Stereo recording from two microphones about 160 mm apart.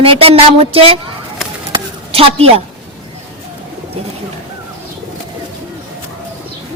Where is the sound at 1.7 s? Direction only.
35° right (ahead or behind).